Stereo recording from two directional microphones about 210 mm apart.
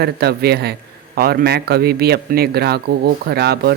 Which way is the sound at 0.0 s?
50° right (ahead or behind).